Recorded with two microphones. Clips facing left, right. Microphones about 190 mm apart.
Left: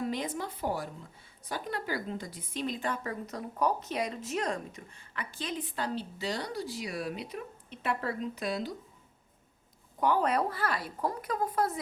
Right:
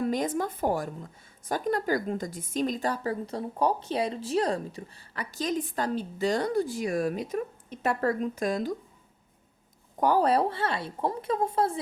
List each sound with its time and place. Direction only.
0.0 s a woman's voice: 45° right (ahead or behind)
10.0 s a woman's voice: 40° right (ahead or behind)